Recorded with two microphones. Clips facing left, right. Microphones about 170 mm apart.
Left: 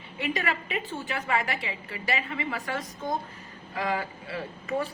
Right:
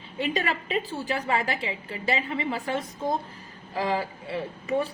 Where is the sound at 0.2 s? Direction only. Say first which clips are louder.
Right 2 dB; 30° right (ahead or behind).